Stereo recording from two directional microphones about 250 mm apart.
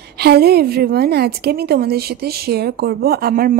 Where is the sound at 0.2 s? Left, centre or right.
Right.